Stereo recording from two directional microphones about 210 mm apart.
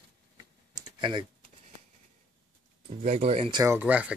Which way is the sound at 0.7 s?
20° right (ahead or behind).